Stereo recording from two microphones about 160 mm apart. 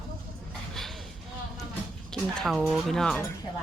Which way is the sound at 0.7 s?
Centre (ahead or behind).